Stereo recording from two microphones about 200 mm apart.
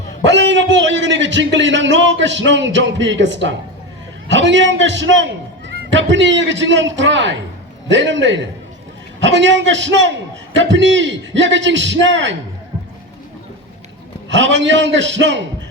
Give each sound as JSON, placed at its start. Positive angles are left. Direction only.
{"t": 0.3, "sound": "a man's voice", "side_deg": -60}
{"t": 14.3, "sound": "a man's voice", "side_deg": -65}